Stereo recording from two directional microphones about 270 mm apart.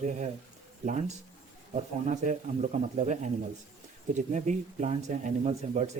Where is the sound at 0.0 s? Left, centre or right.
Right.